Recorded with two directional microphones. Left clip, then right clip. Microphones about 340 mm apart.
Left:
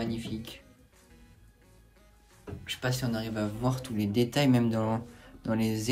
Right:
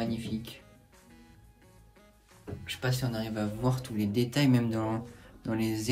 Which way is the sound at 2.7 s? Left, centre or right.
Centre.